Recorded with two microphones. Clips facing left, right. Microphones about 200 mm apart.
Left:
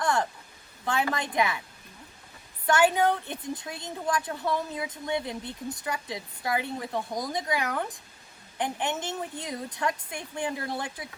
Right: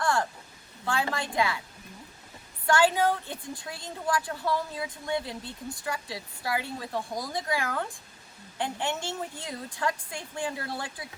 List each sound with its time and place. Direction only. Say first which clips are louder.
0.0 s a sound: left 1 dB; 20° left (ahead or behind)
1.1 s a woman's voice: left 1 dB; 20° left (ahead or behind)
2.6 s a woman's voice: left 1 dB; 20° left (ahead or behind)